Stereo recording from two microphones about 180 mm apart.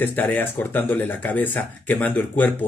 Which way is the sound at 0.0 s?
10° left (ahead or behind).